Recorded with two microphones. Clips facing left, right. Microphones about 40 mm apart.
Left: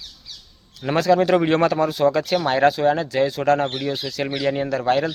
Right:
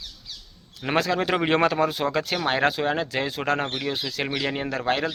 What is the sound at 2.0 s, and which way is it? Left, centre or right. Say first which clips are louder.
Speech: left 5 dB; centre.